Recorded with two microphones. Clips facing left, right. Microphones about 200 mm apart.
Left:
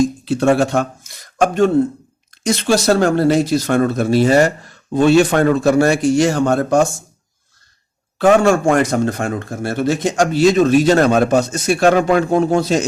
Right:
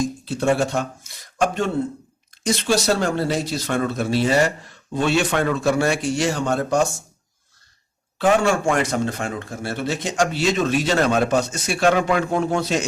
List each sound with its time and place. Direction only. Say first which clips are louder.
0.3 s a sound: left 4 dB; 75° left (ahead or behind); by 1.7 s 45° left (ahead or behind)
2.7 s speech: left 8 dB; 50° left (ahead or behind)
8.2 s speech: left 6 dB; 50° left (ahead or behind)